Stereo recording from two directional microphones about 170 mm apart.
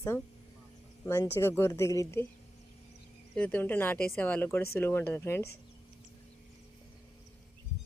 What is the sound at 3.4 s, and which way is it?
Speech, 10° left (ahead or behind).